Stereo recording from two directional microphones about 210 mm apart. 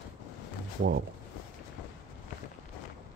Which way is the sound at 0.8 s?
50° right (ahead or behind).